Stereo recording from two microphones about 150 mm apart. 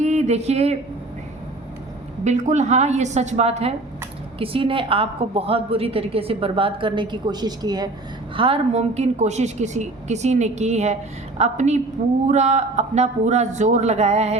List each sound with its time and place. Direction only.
0.0 s speech: 50° right (ahead or behind)
2.2 s a woman's voice: 50° right (ahead or behind); by 7.9 s 25° right (ahead or behind)
8.4 s a woman's voice: 40° right (ahead or behind)